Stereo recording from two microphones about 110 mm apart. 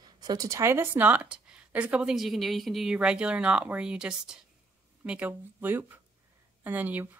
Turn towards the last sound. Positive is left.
turn(degrees=-15)  # may be behind; listen again after turning